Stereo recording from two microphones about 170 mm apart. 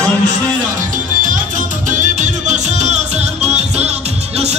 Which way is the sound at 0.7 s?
50° right (ahead or behind).